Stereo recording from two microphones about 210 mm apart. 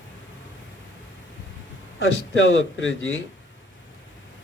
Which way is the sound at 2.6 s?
65° left (ahead or behind).